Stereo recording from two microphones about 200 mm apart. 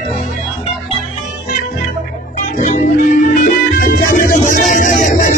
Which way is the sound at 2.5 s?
40° left (ahead or behind).